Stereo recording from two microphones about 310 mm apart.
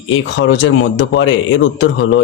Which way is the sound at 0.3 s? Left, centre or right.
Left.